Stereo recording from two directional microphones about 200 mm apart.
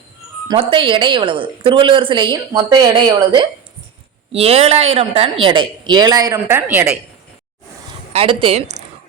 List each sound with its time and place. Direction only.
0.4 s a woman's voice: 25° right (ahead or behind); by 6.9 s 10° right (ahead or behind)
8.1 s a woman's voice: 30° right (ahead or behind)